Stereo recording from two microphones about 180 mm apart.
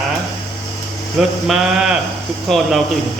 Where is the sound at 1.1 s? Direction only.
5° right (ahead or behind).